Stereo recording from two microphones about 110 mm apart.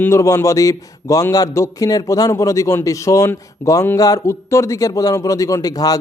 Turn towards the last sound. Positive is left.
turn(degrees=35)  # may be behind; listen again after turning